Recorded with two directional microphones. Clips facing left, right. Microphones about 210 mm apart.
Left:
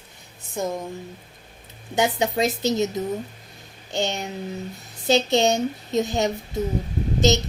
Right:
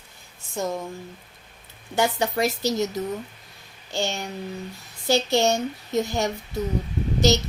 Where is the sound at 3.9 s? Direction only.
20° left (ahead or behind).